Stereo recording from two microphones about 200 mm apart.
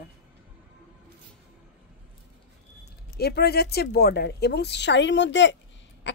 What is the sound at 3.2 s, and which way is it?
Speech, 55° left (ahead or behind).